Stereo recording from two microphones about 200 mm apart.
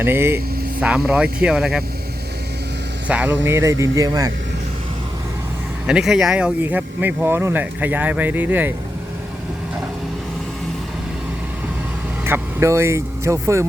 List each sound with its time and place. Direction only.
0.0 s speech: 10° right (ahead or behind)
3.1 s speech: 5° right (ahead or behind)
5.8 s speech: 5° right (ahead or behind)
12.2 s speech: 10° right (ahead or behind)